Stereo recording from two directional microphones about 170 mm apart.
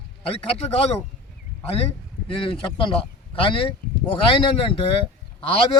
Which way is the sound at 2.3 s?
30° left (ahead or behind).